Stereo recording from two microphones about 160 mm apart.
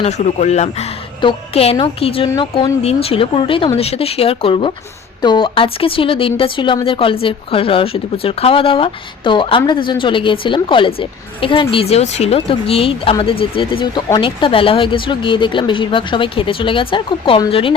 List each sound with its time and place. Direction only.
0.0 s speech: 45° left (ahead or behind)